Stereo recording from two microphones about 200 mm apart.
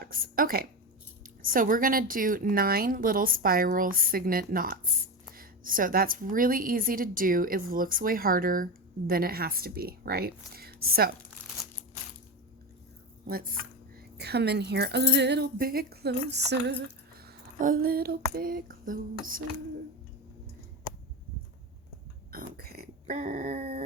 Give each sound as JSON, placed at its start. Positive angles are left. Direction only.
{"t": 0.0, "sound": "a woman's voice", "side_deg": -45}
{"t": 13.2, "sound": "speech", "side_deg": -45}
{"t": 17.2, "sound": "female singing", "side_deg": -45}
{"t": 22.3, "sound": "burping", "side_deg": -50}